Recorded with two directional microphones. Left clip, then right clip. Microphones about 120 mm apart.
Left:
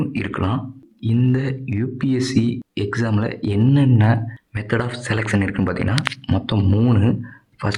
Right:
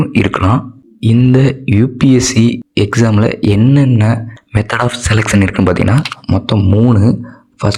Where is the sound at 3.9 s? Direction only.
20° right (ahead or behind).